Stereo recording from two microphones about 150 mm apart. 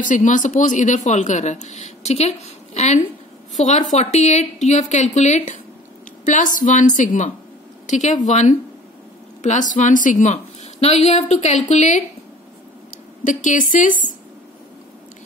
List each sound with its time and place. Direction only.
0.0 s a woman's voice: 60° left (ahead or behind)